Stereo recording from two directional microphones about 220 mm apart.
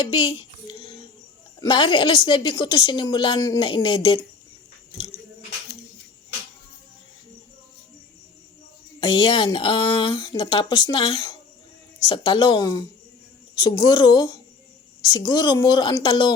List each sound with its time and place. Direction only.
0.0 s a sound: 20° left (ahead or behind)
1.5 s a woman's voice: 20° left (ahead or behind)
9.0 s a woman's voice: 20° left (ahead or behind)